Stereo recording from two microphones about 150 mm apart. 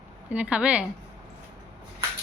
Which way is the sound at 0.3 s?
10° right (ahead or behind).